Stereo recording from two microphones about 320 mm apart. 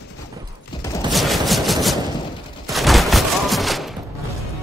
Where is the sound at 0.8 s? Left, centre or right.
Centre.